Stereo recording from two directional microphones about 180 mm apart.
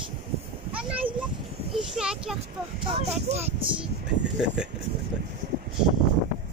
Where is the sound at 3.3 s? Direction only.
35° right (ahead or behind).